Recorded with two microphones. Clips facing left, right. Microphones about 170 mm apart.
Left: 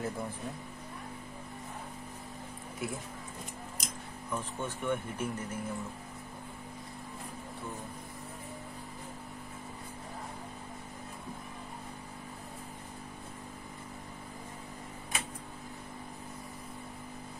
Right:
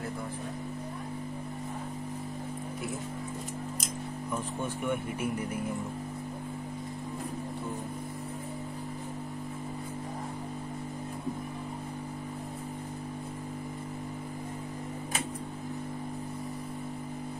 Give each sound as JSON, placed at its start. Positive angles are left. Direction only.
{"t": 4.8, "sound": "speech", "side_deg": -10}